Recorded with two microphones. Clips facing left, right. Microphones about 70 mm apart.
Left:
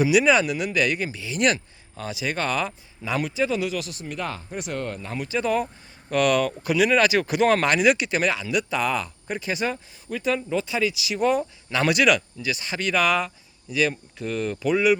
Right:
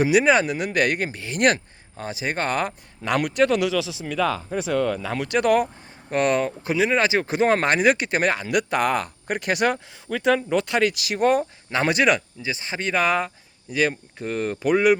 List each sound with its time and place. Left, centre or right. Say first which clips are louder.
0.0 s speech: right 1 dB; right
3.0 s speech: right 5 dB; right
6.1 s speech: even; right
11.7 s speech: even; right